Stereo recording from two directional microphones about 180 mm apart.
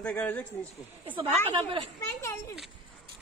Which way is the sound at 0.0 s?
5° left (ahead or behind).